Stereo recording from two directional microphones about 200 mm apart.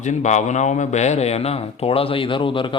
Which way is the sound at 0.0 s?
35° left (ahead or behind).